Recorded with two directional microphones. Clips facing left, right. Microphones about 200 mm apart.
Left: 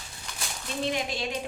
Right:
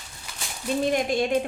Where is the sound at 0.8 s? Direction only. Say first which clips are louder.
Right 6 dB; 50° right (ahead or behind).